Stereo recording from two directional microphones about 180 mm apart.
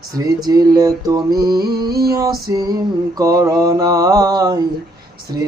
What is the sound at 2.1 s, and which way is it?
Mantra, 20° right (ahead or behind).